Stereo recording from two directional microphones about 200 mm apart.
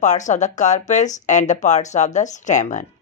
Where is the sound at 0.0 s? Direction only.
35° left (ahead or behind).